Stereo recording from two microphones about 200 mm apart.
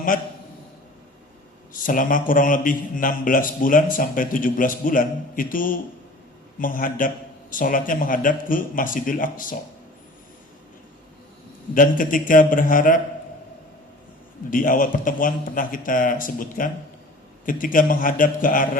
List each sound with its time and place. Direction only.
0.1 s a man's voice: 45° left (ahead or behind)
1.9 s a man's voice: 40° left (ahead or behind)
11.7 s a man's voice: 45° left (ahead or behind)
14.5 s a man's voice: 40° left (ahead or behind)